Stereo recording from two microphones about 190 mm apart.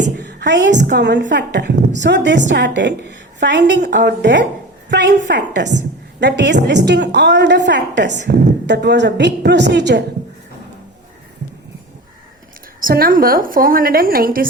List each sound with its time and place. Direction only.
0.2 s a sound: 65° right (ahead or behind)
0.9 s a woman's voice: 70° right (ahead or behind)
12.8 s a woman's voice: 50° right (ahead or behind)